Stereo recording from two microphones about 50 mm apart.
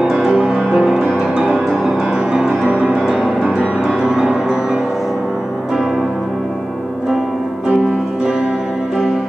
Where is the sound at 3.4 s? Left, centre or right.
Right.